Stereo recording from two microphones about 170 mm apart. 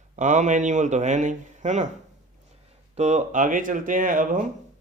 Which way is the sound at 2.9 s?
40° right (ahead or behind).